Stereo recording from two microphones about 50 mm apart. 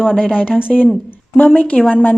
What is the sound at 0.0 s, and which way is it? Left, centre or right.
Speech, centre.